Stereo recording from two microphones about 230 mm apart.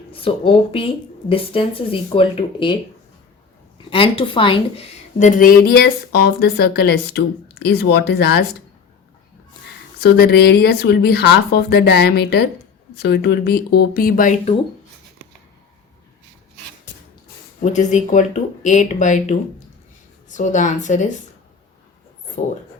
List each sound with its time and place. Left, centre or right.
0.1 s speech: left
3.8 s a woman's voice: left
10.0 s a woman's voice: left
17.6 s speech: left
20.2 s speech: left